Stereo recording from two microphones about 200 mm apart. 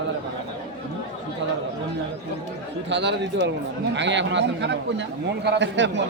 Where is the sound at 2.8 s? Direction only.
60° right (ahead or behind).